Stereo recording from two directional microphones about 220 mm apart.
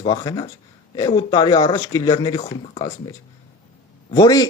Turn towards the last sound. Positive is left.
turn(degrees=15)  # may be behind; listen again after turning